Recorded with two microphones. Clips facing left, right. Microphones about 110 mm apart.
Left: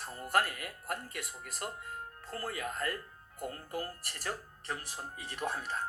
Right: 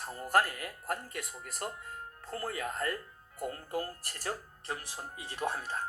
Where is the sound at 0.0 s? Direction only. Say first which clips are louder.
Right 3 dB; 40° right (ahead or behind).